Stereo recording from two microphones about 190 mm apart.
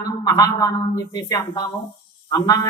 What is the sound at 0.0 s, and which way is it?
A man's voice, 20° left (ahead or behind).